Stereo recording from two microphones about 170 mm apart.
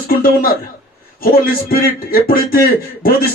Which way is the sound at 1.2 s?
60° left (ahead or behind).